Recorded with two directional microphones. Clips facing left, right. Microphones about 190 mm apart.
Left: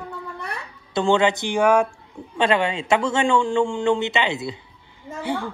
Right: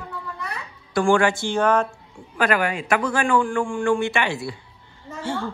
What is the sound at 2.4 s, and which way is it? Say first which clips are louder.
A man's voice: left 1 dB; 25° left (ahead or behind).